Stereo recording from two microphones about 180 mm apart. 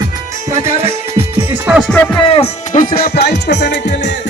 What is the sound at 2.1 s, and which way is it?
Music, 30° left (ahead or behind).